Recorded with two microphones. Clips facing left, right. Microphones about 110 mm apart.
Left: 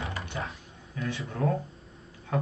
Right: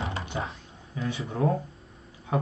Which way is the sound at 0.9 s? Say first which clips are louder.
Right 3 dB; 20° right (ahead or behind).